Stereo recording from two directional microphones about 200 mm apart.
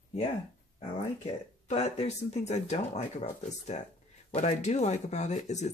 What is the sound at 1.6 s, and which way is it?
Speech, 35° left (ahead or behind).